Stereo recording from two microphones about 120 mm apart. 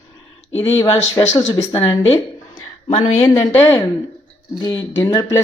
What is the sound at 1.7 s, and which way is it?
A woman's voice, 40° left (ahead or behind).